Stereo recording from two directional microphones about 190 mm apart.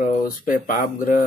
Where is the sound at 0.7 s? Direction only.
45° left (ahead or behind).